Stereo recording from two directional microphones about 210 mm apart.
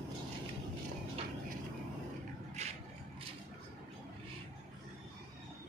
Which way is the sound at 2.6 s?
30° right (ahead or behind).